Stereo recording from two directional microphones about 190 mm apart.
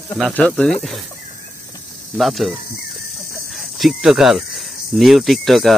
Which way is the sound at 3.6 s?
Centre (ahead or behind).